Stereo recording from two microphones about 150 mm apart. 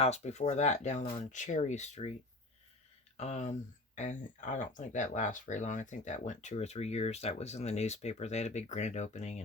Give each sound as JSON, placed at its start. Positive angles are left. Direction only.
{"t": 0.0, "sound": "speech", "side_deg": 50}
{"t": 3.2, "sound": "speech", "side_deg": 50}